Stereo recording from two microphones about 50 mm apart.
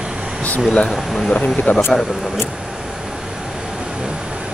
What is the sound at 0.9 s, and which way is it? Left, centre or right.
Speech, centre.